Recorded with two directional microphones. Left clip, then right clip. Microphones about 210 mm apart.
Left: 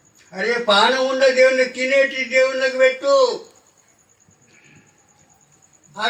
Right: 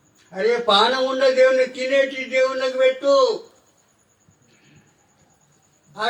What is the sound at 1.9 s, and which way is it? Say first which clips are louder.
A man's voice: left 2 dB; 20° right (ahead or behind).